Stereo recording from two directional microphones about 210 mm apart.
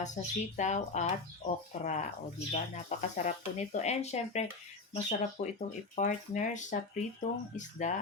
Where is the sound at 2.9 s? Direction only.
35° left (ahead or behind).